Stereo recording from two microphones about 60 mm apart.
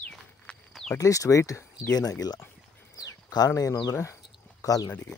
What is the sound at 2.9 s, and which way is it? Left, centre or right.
Speech, left.